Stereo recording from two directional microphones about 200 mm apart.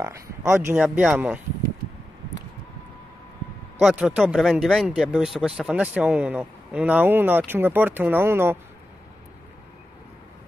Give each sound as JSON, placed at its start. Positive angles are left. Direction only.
{"t": 0.0, "sound": "speech", "side_deg": -15}
{"t": 0.8, "sound": "speech", "side_deg": 0}
{"t": 3.8, "sound": "speech", "side_deg": -5}